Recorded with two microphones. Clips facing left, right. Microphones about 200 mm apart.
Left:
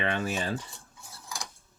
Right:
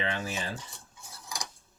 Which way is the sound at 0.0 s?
60° left (ahead or behind).